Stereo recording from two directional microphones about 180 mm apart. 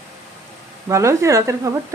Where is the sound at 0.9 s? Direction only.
15° right (ahead or behind).